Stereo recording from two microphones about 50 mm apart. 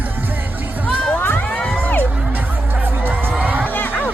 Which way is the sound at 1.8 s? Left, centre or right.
Left.